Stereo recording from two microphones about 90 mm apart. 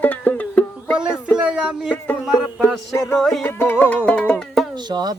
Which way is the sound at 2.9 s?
30° left (ahead or behind).